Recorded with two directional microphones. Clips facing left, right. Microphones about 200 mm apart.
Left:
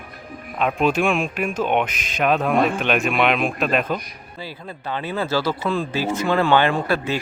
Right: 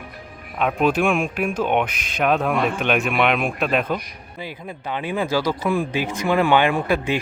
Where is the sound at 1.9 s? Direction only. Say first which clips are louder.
Left 2 dB; 55° right (ahead or behind).